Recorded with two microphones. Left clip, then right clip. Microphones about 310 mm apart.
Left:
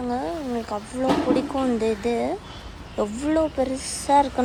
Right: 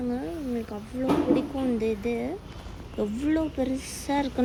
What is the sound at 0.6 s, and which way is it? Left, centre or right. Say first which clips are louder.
Speech: left 6 dB; left.